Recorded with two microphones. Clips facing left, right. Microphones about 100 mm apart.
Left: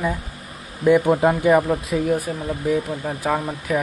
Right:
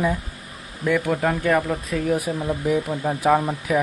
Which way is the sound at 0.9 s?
20° left (ahead or behind).